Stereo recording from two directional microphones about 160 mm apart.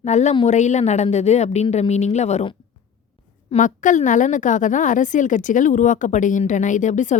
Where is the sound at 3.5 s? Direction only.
50° left (ahead or behind).